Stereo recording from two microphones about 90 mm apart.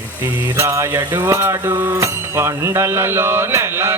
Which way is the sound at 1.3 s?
30° right (ahead or behind).